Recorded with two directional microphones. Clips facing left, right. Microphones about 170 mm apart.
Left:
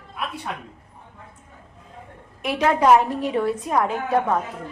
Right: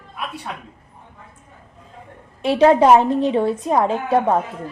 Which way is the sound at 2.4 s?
30° right (ahead or behind).